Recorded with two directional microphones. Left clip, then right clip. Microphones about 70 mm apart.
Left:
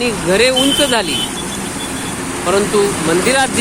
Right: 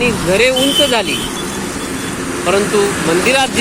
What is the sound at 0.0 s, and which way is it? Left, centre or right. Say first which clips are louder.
Speech: right 1 dB; centre.